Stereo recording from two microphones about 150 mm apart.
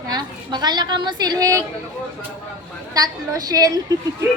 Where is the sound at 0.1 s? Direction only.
30° right (ahead or behind).